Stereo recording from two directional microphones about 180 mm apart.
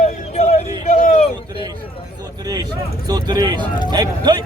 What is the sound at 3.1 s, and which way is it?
Speech, 20° right (ahead or behind).